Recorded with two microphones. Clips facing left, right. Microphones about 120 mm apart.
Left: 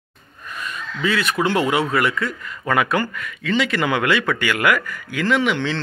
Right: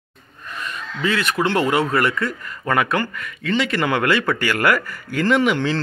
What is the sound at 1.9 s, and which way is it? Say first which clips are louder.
A man's voice: right 1 dB; 5° left (ahead or behind).